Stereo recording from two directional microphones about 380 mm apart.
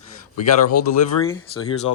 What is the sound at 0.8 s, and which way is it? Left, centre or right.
Speech, left.